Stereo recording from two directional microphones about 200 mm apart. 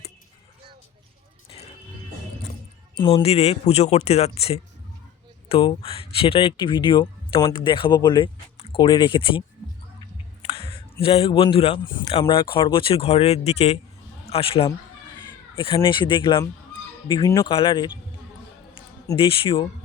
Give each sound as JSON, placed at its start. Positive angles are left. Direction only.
{"t": 2.9, "sound": "speech", "side_deg": 25}
{"t": 10.4, "sound": "speech", "side_deg": 30}
{"t": 18.7, "sound": "a sound", "side_deg": 25}